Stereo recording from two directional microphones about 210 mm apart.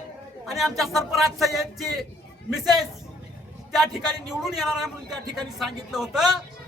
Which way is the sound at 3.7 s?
Centre (ahead or behind).